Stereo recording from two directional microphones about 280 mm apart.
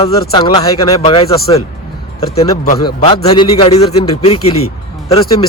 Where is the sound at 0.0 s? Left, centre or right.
Centre.